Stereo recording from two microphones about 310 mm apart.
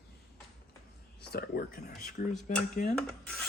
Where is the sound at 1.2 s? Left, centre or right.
Left.